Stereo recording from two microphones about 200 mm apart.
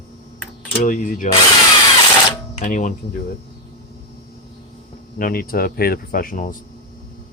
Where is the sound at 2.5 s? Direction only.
40° left (ahead or behind).